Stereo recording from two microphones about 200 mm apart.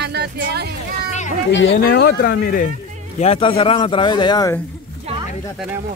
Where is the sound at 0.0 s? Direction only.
55° right (ahead or behind).